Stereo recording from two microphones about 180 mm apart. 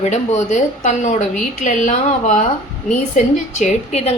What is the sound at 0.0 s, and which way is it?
A woman's voice, 40° left (ahead or behind).